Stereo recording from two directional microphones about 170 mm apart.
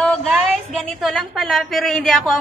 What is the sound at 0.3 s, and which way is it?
A woman's voice, centre (ahead or behind).